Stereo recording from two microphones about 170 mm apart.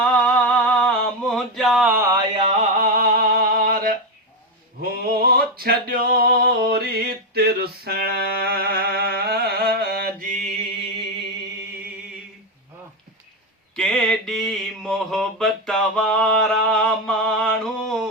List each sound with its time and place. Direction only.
0.0 s a sound: 5° left (ahead or behind)
2.3 s a sound: 35° right (ahead or behind)
3.0 s music: 55° right (ahead or behind)
4.8 s male singing: 60° right (ahead or behind)
10.3 s music: 45° right (ahead or behind)
13.7 s mantra: 5° left (ahead or behind)